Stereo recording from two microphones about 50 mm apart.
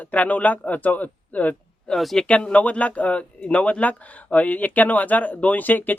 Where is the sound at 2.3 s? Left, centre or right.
Left.